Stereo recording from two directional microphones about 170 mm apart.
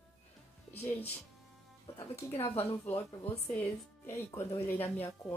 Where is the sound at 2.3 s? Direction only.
40° left (ahead or behind).